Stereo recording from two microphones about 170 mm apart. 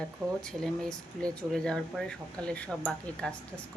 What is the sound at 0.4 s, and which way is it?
Speech, 5° left (ahead or behind).